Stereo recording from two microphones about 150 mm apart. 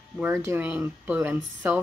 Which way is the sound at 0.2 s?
15° right (ahead or behind).